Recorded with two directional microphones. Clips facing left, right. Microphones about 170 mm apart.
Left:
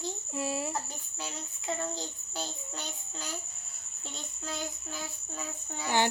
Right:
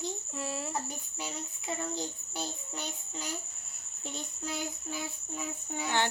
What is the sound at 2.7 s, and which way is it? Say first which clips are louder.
Child singing: right 2 dB; 15° right (ahead or behind).